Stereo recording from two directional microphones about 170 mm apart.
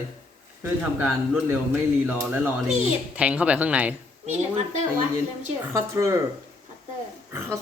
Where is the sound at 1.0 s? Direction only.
Centre (ahead or behind).